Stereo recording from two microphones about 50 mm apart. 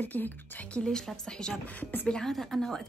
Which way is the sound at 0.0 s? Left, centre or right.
Left.